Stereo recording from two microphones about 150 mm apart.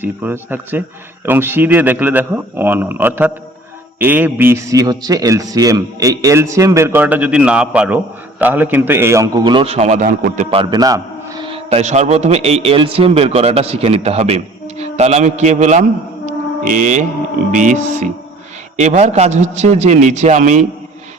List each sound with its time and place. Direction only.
0.0 s a man's voice: 15° right (ahead or behind); by 10.5 s 60° right (ahead or behind)
10.5 s a man's voice: 30° right (ahead or behind)
11.4 s a man's voice: 40° right (ahead or behind)
16.2 s music: 55° right (ahead or behind)
17.5 s a man's voice: 55° right (ahead or behind)